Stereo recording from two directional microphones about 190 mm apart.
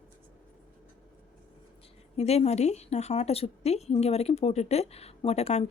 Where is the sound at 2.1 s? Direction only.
35° left (ahead or behind).